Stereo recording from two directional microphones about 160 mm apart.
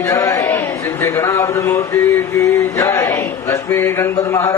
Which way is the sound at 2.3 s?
20° left (ahead or behind).